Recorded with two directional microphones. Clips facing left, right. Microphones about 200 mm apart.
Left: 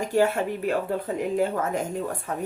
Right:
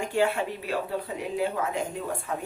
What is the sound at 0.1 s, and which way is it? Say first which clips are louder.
Speech: left 4 dB; 40° left (ahead or behind).